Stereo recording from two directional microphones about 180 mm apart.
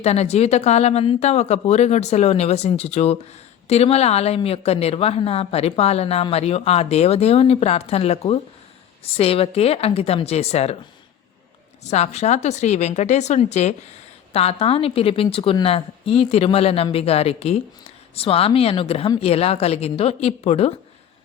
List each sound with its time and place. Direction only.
0.0 s a woman's voice: 35° left (ahead or behind)
11.8 s a woman's voice: 40° left (ahead or behind)